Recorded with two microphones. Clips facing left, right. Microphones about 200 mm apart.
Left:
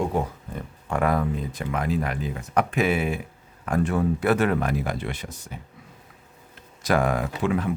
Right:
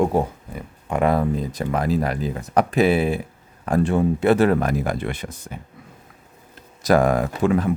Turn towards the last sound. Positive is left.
turn(degrees=-45)  # may be behind; listen again after turning